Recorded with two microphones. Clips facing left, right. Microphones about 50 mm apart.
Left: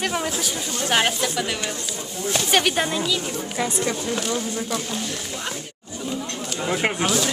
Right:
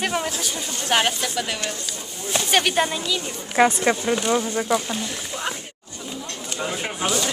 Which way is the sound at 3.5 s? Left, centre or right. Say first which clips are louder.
Right 8 dB; right.